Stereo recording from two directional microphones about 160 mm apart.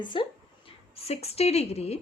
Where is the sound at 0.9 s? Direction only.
40° left (ahead or behind).